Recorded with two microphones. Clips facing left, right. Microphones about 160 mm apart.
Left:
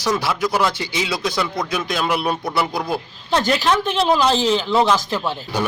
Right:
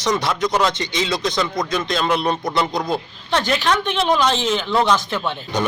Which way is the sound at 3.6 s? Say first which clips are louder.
Left 1 dB; centre (ahead or behind).